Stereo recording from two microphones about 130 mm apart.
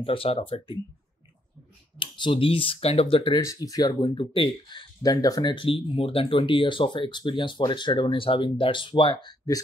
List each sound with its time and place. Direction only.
0.0 s speech: 45° left (ahead or behind)
2.0 s speech: 40° left (ahead or behind)
3.4 s speech: 30° left (ahead or behind); by 9.3 s 45° left (ahead or behind)